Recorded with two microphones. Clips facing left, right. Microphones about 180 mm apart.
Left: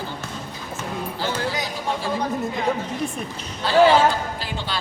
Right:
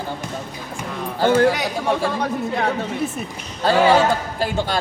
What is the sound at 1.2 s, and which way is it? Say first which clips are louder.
A man's voice: right 12 dB; 55° right (ahead or behind).